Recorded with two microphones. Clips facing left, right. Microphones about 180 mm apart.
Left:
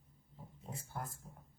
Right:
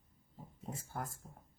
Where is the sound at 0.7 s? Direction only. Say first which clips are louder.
Right 2 dB; 45° right (ahead or behind).